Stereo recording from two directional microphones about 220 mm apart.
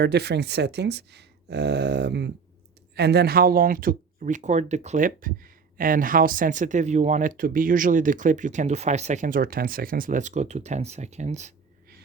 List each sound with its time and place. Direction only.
0.0 s speech: 50° right (ahead or behind); by 11.5 s 30° right (ahead or behind)